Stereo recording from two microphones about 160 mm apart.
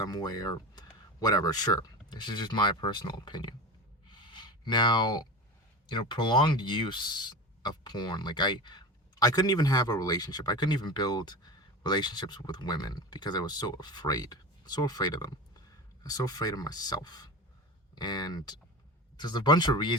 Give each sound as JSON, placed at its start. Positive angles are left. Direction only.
{"t": 0.0, "sound": "speech", "side_deg": 25}
{"t": 4.1, "sound": "a sound", "side_deg": 30}
{"t": 5.9, "sound": "speech", "side_deg": 30}